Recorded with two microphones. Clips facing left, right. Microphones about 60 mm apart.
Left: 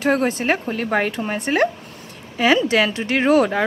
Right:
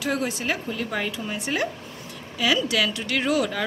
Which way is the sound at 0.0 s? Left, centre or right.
Left.